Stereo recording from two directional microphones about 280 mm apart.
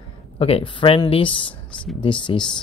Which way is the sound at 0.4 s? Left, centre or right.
Left.